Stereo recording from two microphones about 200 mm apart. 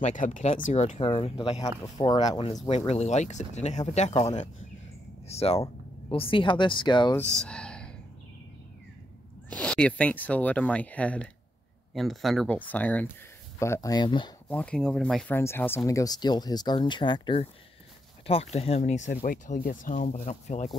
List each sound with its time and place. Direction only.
0.0 s speech: 40° left (ahead or behind); by 2.5 s 25° left (ahead or behind)
2.9 s speech: 35° left (ahead or behind)
7.2 s speech: 5° left (ahead or behind)
9.5 s speech: 5° left (ahead or behind); by 14.3 s 20° left (ahead or behind)
14.5 s speech: 5° left (ahead or behind); by 20.7 s 35° left (ahead or behind)